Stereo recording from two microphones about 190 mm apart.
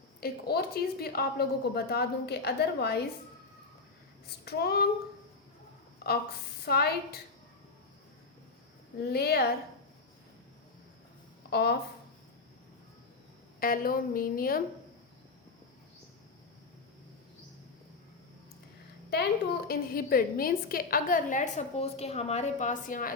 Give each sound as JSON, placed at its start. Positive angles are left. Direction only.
{"t": 0.2, "sound": "a woman's voice", "side_deg": 55}
{"t": 4.4, "sound": "a woman's voice", "side_deg": 55}
{"t": 6.0, "sound": "a sound", "side_deg": 55}
{"t": 6.7, "sound": "a woman's voice", "side_deg": 55}
{"t": 9.0, "sound": "a woman's voice", "side_deg": 55}
{"t": 11.5, "sound": "a woman's voice", "side_deg": 55}
{"t": 13.6, "sound": "a woman's voice", "side_deg": 50}
{"t": 19.1, "sound": "a woman's voice", "side_deg": 55}